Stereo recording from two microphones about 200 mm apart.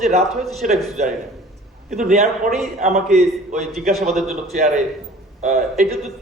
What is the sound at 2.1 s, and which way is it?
A man's voice, 35° right (ahead or behind).